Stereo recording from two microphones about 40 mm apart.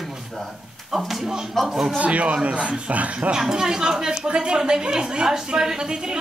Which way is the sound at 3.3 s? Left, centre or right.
Centre.